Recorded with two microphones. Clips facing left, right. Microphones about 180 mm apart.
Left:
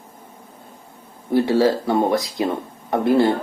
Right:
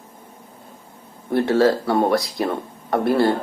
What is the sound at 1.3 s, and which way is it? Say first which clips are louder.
Speech: even; 10° left (ahead or behind).